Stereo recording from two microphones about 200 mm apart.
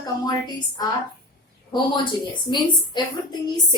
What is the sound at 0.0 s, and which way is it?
Speech, 20° left (ahead or behind).